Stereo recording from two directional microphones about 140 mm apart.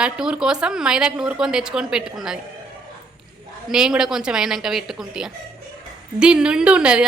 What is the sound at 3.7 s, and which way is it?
A woman's voice, 5° right (ahead or behind).